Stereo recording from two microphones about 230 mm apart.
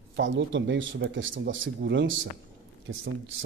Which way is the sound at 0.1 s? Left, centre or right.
Right.